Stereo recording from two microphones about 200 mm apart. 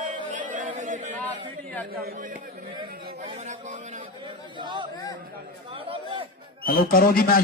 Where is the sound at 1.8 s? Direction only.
45° right (ahead or behind).